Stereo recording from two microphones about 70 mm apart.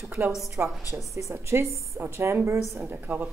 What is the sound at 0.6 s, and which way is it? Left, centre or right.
A woman's voice, right.